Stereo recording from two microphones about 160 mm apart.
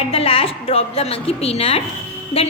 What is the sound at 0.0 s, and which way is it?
A woman's voice, 35° left (ahead or behind).